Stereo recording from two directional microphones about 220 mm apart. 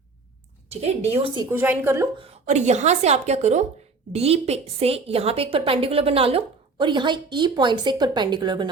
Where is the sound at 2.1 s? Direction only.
30° right (ahead or behind).